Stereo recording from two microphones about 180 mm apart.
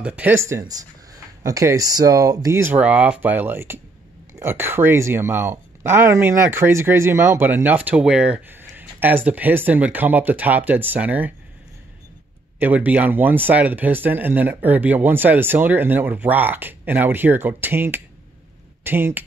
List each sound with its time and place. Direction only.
0.0 s speech: 10° right (ahead or behind)
12.5 s speech: 10° right (ahead or behind)